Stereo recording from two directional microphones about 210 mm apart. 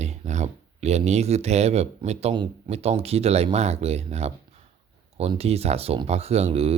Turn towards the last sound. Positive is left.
turn(degrees=-30)  # may be behind; listen again after turning